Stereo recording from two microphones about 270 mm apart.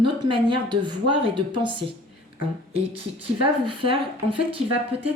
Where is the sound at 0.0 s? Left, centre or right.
Centre.